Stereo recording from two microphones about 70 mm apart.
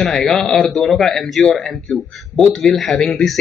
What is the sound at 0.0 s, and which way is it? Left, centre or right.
Speech, centre.